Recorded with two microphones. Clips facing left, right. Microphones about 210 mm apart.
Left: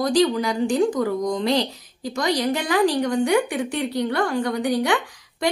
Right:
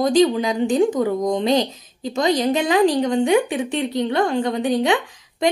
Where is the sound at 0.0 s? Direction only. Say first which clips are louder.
Right 3 dB; 20° right (ahead or behind).